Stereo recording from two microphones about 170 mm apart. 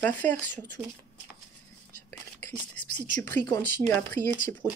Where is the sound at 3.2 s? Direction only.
20° left (ahead or behind).